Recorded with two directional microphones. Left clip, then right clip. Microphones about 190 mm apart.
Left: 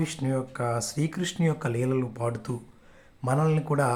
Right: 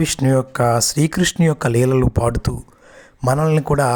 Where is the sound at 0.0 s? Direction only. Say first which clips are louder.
Right 12 dB; 40° right (ahead or behind).